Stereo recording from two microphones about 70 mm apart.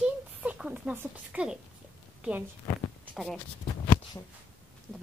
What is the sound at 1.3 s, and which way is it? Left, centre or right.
Speech, centre.